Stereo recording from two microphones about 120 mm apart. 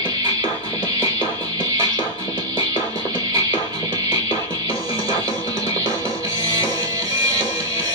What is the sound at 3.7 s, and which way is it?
Music, 30° right (ahead or behind).